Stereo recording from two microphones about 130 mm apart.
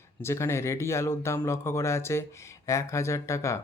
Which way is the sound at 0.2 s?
20° left (ahead or behind).